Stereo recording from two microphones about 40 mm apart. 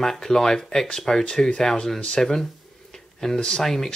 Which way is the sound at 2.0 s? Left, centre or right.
Left.